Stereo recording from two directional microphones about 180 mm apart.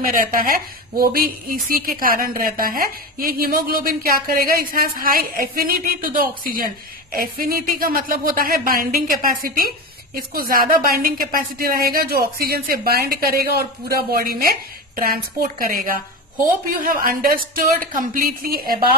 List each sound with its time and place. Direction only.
0.0 s a woman's voice: 50° right (ahead or behind)
15.6 s a woman's voice: 50° right (ahead or behind)